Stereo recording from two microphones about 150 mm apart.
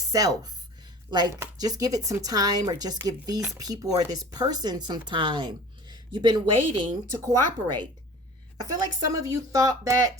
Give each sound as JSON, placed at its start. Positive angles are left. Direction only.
{"t": 0.0, "sound": "a woman's voice", "side_deg": -20}